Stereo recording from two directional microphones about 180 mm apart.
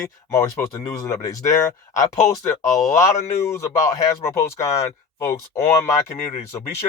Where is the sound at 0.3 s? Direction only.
20° left (ahead or behind).